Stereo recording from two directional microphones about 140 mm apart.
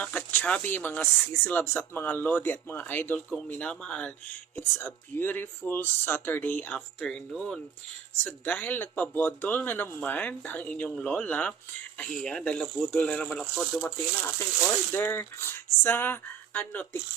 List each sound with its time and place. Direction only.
0.0 s speech: 10° left (ahead or behind)